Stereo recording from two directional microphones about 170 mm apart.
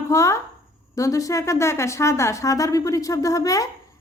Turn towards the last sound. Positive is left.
turn(degrees=20)  # may be behind; listen again after turning